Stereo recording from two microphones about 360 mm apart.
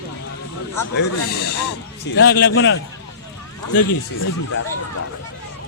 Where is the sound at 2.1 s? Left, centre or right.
Left.